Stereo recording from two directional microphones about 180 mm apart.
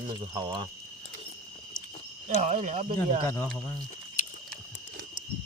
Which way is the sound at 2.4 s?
45° right (ahead or behind).